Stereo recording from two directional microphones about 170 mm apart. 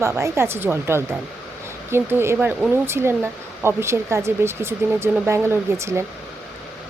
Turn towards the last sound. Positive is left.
turn(degrees=-15)  # may be behind; listen again after turning